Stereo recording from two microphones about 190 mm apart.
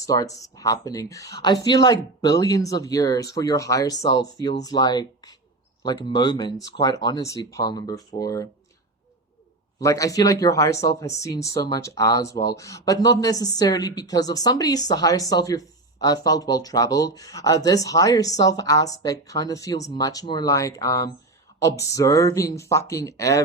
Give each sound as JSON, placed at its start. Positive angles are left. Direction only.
{"t": 0.0, "sound": "speech", "side_deg": 20}
{"t": 9.8, "sound": "speech", "side_deg": 15}